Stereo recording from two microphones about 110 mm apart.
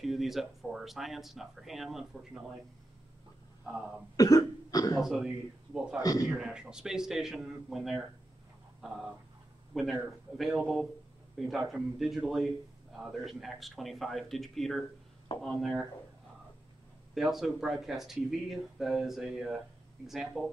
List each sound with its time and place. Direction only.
0.0 s speech: centre (ahead or behind)
4.2 s cough: 35° left (ahead or behind)
5.0 s speech: 5° right (ahead or behind)
9.7 s speech: centre (ahead or behind)
17.1 s speech: 5° right (ahead or behind)